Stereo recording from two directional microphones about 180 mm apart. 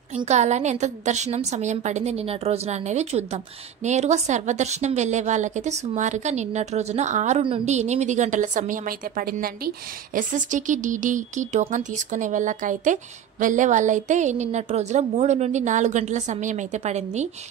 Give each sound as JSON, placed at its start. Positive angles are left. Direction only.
{"t": 0.1, "sound": "a woman's voice", "side_deg": -40}